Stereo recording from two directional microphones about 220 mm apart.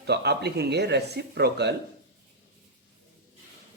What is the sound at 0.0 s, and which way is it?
Speech, 50° right (ahead or behind).